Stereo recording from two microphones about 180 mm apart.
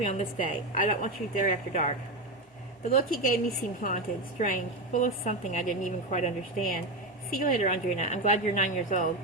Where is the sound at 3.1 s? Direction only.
50° left (ahead or behind).